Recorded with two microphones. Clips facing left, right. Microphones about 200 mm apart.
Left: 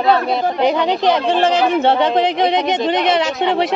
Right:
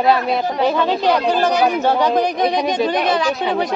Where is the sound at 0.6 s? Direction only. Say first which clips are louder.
Left 1 dB; 20° left (ahead or behind).